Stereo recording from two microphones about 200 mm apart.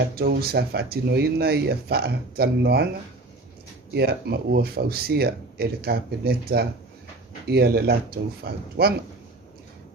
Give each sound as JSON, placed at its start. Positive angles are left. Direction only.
{"t": 0.2, "sound": "speech", "side_deg": -50}
{"t": 3.9, "sound": "speech", "side_deg": -55}